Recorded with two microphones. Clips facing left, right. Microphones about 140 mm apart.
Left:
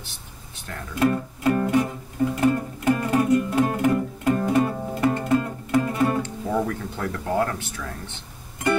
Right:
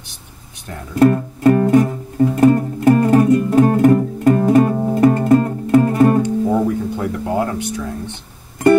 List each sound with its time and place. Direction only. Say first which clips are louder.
0.9 s music: right 9 dB; 45° right (ahead or behind)
6.2 s music: right 9 dB; 15° right (ahead or behind)